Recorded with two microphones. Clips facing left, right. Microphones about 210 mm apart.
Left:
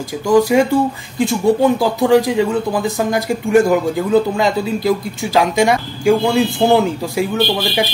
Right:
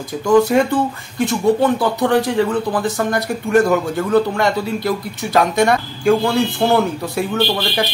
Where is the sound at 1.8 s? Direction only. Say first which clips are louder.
Left 3 dB; centre (ahead or behind).